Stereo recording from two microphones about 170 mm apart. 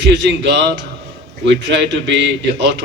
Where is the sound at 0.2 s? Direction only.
90° right.